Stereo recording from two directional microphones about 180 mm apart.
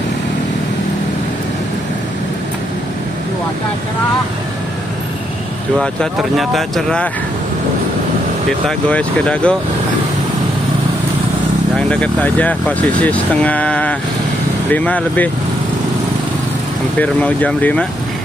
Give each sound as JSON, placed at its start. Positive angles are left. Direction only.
{"t": 5.8, "sound": "speech", "side_deg": 0}
{"t": 8.6, "sound": "speech", "side_deg": 5}
{"t": 11.9, "sound": "speech", "side_deg": 5}
{"t": 17.0, "sound": "speech", "side_deg": 10}